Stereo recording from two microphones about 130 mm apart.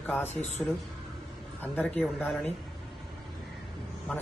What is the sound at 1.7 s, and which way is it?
Speech, 10° left (ahead or behind).